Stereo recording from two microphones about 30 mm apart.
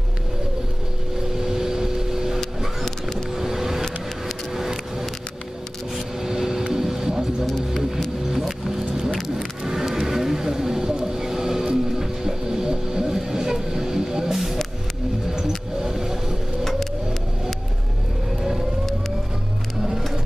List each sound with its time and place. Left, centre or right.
1.4 s vehicle: centre
2.8 s vehicle: centre
3.3 s vehicle: centre
6.3 s vehicle: centre
6.7 s music: centre
8.3 s vehicle: centre